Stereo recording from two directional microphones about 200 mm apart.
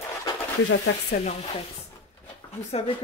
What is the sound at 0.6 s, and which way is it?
Speech, 70° left (ahead or behind).